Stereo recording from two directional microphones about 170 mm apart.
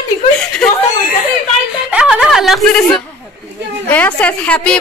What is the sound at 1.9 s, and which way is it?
A woman's voice, 5° right (ahead or behind).